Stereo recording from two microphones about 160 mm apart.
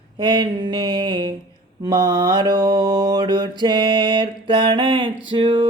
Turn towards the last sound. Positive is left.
turn(degrees=-30)  # may be behind; listen again after turning